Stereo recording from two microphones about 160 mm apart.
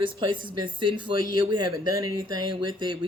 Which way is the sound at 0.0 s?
30° right (ahead or behind).